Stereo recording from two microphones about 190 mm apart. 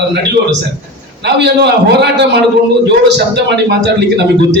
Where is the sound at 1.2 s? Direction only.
65° right (ahead or behind).